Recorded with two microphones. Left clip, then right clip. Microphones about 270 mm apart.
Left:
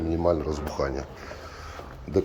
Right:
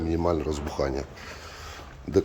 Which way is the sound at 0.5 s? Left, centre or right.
Right.